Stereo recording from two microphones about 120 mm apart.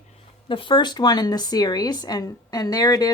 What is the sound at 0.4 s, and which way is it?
A woman's voice, 45° left (ahead or behind).